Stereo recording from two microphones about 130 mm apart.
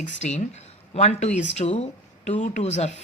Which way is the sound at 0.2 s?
65° left (ahead or behind).